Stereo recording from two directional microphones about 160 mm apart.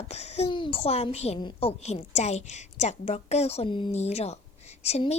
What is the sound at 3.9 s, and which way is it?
A woman's voice, 40° left (ahead or behind).